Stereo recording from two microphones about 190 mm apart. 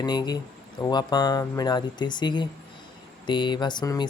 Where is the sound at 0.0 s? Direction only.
20° left (ahead or behind).